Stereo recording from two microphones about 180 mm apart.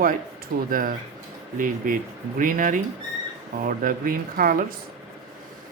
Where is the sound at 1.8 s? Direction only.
50° right (ahead or behind).